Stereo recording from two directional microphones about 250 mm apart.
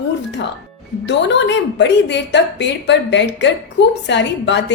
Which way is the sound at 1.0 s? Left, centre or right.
Left.